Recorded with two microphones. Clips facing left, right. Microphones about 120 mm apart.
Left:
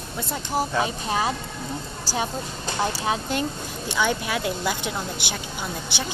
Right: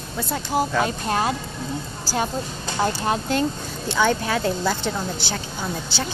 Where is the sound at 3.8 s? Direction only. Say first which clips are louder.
Right 4 dB; 15° left (ahead or behind).